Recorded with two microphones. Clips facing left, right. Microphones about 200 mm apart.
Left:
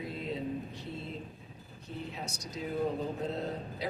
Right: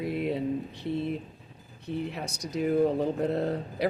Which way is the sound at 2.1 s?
65° right (ahead or behind).